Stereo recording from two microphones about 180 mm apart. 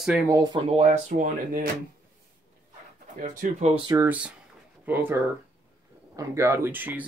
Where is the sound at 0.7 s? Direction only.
45° right (ahead or behind).